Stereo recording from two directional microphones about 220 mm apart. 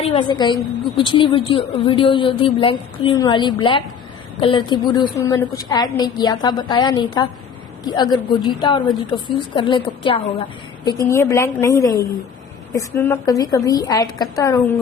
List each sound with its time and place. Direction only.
0.0 s a woman's voice: 25° left (ahead or behind)
10.8 s a woman's voice: 15° left (ahead or behind)